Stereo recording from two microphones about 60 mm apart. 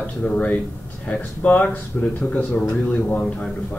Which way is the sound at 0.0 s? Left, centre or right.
Left.